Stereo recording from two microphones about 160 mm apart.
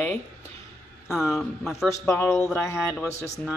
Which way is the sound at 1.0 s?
Centre (ahead or behind).